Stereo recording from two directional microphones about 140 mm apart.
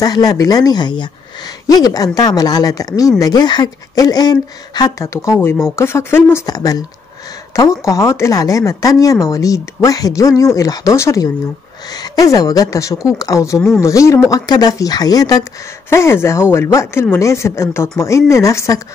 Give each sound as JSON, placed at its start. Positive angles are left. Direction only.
{"t": 0.0, "sound": "speech", "side_deg": 25}